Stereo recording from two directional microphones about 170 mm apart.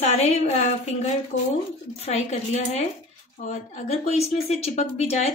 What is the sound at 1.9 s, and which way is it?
Speech, 40° left (ahead or behind).